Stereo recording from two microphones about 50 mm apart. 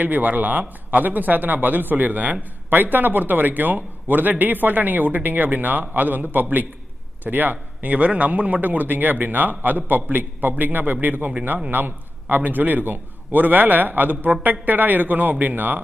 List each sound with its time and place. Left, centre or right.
0.0 s a man's voice: right